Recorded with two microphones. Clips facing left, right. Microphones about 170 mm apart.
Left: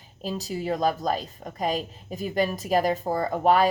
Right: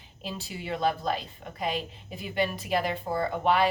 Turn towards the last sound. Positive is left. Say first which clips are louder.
# left 4 dB
turn(degrees=40)  # may be behind; listen again after turning